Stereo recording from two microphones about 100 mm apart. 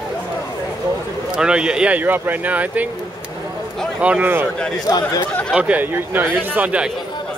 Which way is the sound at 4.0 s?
15° right (ahead or behind).